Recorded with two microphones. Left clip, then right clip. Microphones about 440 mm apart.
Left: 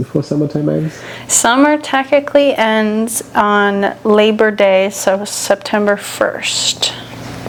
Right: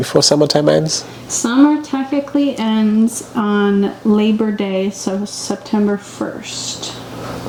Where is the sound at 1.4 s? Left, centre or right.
Left.